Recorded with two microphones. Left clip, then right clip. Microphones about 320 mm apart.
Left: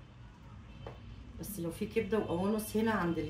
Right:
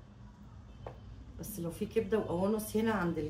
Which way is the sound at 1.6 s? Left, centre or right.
Centre.